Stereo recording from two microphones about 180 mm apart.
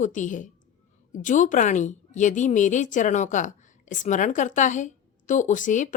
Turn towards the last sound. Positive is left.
turn(degrees=45)  # may be behind; listen again after turning